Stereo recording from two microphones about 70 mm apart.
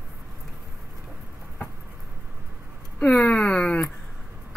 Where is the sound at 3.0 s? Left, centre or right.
Left.